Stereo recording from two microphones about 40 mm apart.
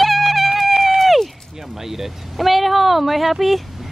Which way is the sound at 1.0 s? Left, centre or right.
Centre.